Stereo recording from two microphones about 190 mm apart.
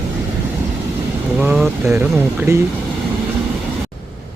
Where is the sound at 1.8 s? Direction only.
15° right (ahead or behind).